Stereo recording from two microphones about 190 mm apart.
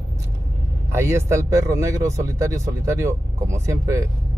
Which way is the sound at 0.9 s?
15° right (ahead or behind).